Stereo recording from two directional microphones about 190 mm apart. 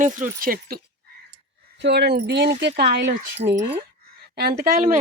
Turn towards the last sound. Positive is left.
turn(degrees=-50)  # may be behind; listen again after turning